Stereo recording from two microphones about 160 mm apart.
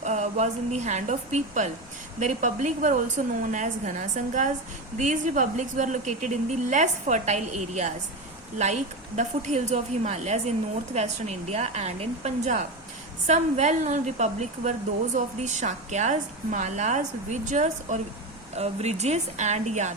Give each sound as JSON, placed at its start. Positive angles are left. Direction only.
{"t": 0.0, "sound": "a woman's voice", "side_deg": -45}